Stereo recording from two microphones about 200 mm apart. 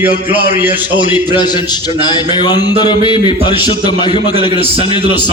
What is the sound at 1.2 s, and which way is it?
A man's voice, 20° left (ahead or behind).